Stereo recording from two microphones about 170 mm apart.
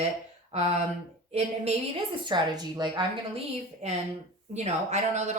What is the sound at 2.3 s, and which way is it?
Speech, 25° right (ahead or behind).